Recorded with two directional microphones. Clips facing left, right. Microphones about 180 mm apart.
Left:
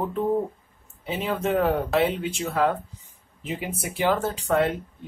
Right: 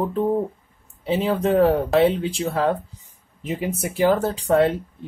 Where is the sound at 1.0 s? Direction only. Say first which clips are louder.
Right 6 dB; 30° right (ahead or behind).